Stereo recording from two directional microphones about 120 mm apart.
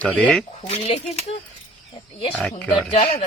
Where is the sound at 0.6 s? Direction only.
55° left (ahead or behind).